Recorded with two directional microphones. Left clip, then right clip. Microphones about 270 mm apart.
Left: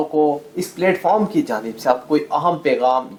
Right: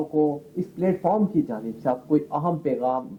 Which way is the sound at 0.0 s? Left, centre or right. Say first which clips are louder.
Left 6 dB; left.